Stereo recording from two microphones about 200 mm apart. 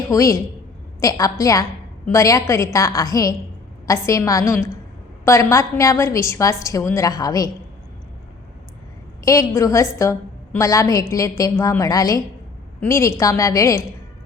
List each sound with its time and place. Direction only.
0.1 s a woman's voice: 15° left (ahead or behind)
9.2 s a woman's voice: 15° left (ahead or behind)